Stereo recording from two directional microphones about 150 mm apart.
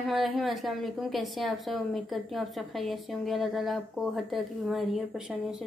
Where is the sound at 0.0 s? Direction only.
Centre (ahead or behind).